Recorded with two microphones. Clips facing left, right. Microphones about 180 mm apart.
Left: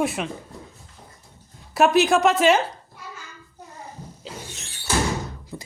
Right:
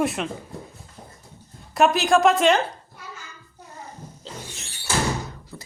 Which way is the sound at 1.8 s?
Centre (ahead or behind).